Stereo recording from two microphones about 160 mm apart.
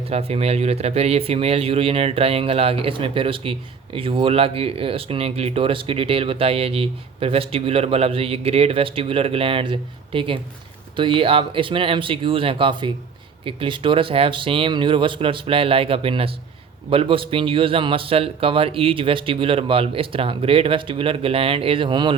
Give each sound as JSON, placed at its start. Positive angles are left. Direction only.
{"t": 0.1, "sound": "speech", "side_deg": -40}